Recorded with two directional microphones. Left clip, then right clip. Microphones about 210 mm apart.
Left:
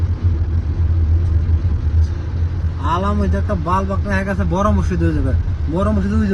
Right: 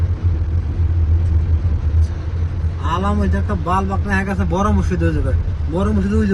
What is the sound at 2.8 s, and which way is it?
Speech, 45° left (ahead or behind).